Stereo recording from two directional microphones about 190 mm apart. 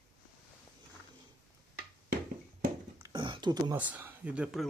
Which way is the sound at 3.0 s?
25° right (ahead or behind).